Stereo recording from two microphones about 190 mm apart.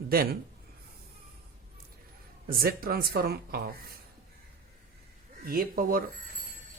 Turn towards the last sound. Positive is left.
turn(degrees=-50)  # may be behind; listen again after turning